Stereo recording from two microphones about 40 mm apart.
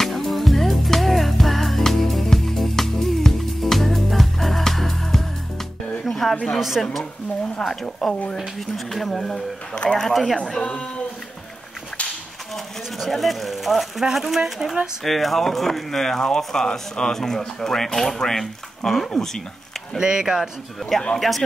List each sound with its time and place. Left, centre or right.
0.0 s music: centre
6.0 s a sound: centre
6.8 s speech: centre
10.6 s speech: left
13.0 s speech: centre
15.0 s speech: centre
20.0 s speech: centre
21.2 s speech: centre